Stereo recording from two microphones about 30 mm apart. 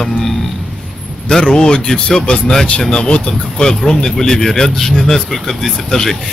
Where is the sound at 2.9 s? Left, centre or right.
Left.